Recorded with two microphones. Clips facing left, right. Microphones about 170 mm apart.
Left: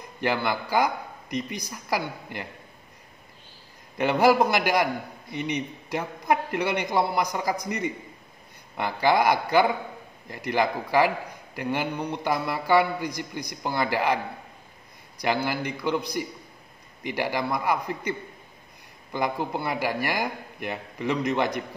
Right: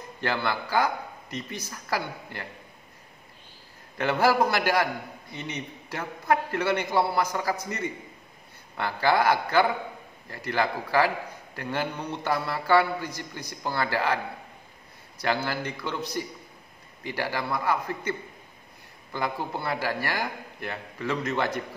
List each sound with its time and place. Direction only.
0.2 s a man's voice: 15° left (ahead or behind)
4.0 s a man's voice: 15° left (ahead or behind)
19.1 s a man's voice: 15° left (ahead or behind)